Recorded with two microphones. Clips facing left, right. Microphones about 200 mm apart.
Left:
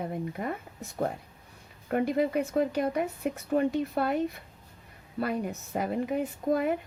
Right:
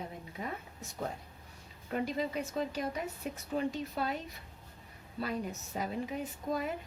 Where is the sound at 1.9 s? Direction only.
55° left (ahead or behind).